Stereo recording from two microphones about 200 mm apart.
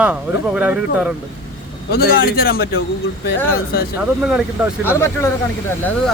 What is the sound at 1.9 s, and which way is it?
Speech, 45° left (ahead or behind).